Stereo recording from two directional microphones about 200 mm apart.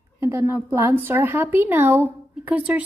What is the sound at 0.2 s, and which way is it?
A woman's voice, 15° right (ahead or behind).